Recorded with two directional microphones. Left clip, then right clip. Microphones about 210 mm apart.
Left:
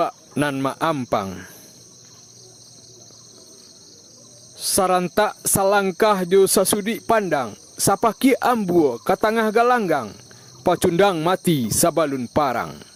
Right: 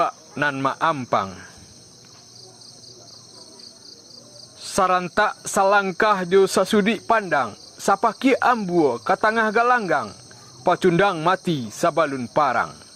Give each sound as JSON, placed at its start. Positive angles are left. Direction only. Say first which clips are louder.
{"t": 0.0, "sound": "speech", "louder": "right 1 dB", "side_deg": 45}
{"t": 4.6, "sound": "speech", "louder": "even", "side_deg": 45}